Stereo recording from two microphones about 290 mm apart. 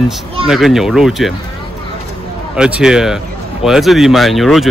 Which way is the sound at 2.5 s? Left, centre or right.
Centre.